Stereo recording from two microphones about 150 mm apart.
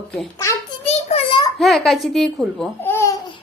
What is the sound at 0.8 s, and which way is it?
Child singing, 40° left (ahead or behind).